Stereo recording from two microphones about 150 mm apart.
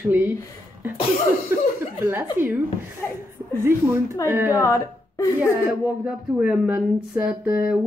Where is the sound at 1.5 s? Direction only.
15° right (ahead or behind).